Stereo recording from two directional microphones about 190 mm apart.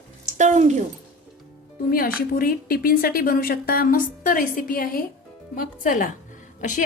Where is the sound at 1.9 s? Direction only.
50° left (ahead or behind).